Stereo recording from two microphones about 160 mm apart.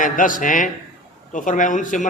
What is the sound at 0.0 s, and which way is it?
A man's voice, 55° left (ahead or behind).